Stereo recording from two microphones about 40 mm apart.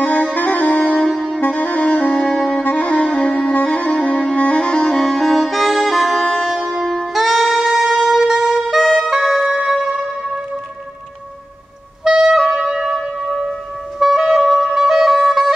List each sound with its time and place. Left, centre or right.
0.0 s music: left
0.7 s music: left
1.4 s music: left
2.2 s saxophone: centre
2.6 s saxophone: left
4.0 s music: left
5.0 s music: centre
7.0 s saxophone: centre
12.0 s clarinet: centre